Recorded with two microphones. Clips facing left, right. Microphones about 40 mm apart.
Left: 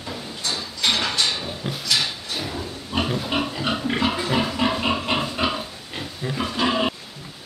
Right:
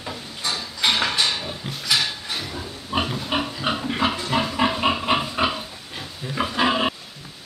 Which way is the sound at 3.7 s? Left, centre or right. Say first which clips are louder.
Right 1 dB; centre.